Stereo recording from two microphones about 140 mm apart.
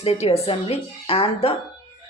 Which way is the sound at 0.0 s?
45° left (ahead or behind).